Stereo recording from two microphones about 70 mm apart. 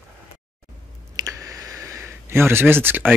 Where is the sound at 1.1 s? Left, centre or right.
Right.